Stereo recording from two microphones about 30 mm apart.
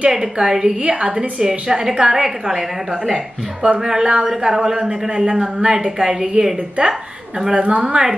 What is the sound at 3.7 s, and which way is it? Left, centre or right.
A woman's voice, centre.